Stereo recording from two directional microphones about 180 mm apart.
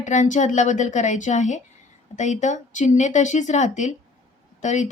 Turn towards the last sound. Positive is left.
turn(degrees=40)  # may be behind; listen again after turning